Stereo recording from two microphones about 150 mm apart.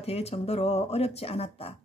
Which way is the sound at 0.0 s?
45° left (ahead or behind).